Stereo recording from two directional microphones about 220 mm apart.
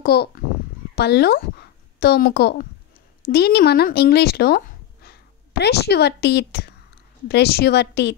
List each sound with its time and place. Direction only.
0.0 s a woman's voice: 45° left (ahead or behind)